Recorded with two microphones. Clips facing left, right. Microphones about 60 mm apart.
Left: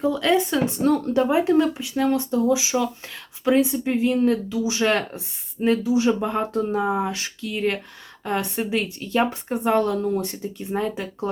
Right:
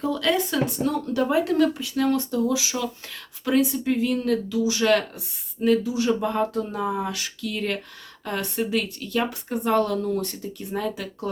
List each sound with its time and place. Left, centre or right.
0.0 s speech: left